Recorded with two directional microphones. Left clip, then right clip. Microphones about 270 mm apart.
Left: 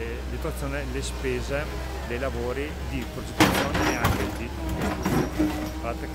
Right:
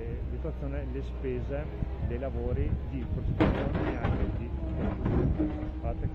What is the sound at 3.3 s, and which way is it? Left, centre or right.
Speech, left.